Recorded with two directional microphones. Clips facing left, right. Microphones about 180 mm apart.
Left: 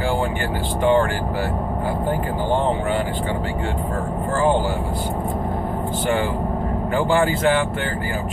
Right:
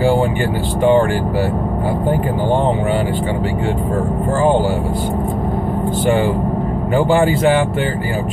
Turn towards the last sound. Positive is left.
turn(degrees=-20)  # may be behind; listen again after turning